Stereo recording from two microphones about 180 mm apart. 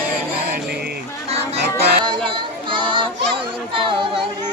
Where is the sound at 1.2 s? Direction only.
35° right (ahead or behind).